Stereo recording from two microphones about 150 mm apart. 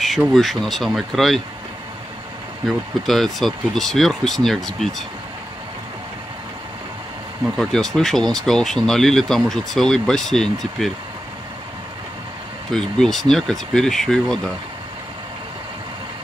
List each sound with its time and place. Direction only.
0.0 s speech: centre (ahead or behind)
2.6 s speech: centre (ahead or behind)
7.5 s speech: 5° left (ahead or behind)
12.7 s speech: centre (ahead or behind)